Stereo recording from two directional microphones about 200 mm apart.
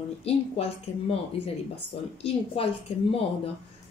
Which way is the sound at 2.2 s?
30° left (ahead or behind).